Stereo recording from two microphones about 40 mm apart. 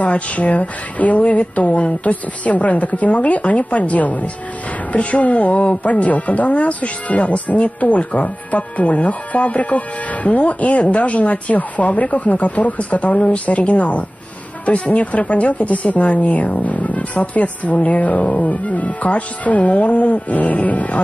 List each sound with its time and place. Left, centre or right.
0.0 s speech: left